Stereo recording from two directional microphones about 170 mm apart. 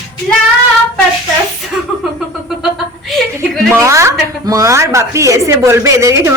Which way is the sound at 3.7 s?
15° right (ahead or behind).